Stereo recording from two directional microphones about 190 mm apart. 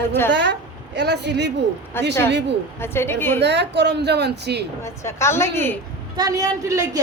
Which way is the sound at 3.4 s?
65° right (ahead or behind).